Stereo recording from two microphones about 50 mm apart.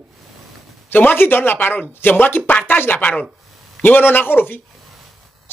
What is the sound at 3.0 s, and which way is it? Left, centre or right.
Speech, left.